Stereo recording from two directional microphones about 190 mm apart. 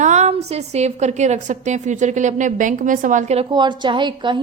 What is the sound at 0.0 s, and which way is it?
A woman's voice, 40° right (ahead or behind).